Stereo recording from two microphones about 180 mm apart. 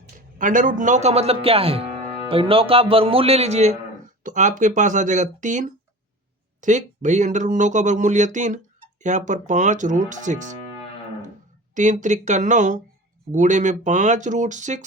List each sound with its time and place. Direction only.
0.3 s speech: 50° right (ahead or behind)
11.7 s speech: 45° right (ahead or behind)